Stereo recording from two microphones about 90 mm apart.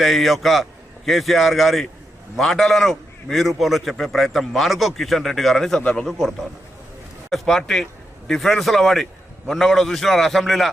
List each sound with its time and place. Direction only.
0.0 s a man's voice: centre (ahead or behind)